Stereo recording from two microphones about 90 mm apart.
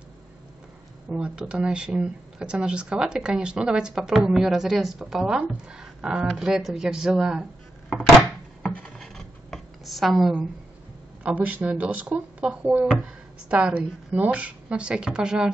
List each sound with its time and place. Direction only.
1.1 s speech: 10° right (ahead or behind)
8.6 s rub: 10° left (ahead or behind)
9.0 s a sound: centre (ahead or behind)
11.2 s speech: 15° right (ahead or behind)